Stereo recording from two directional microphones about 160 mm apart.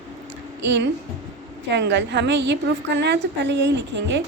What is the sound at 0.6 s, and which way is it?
A woman's voice, 90° right.